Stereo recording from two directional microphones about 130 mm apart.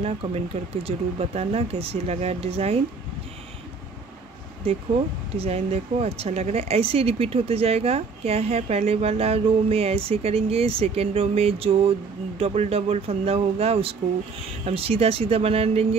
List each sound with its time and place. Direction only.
0.8 s speech: 55° right (ahead or behind)
4.6 s speech: 50° right (ahead or behind)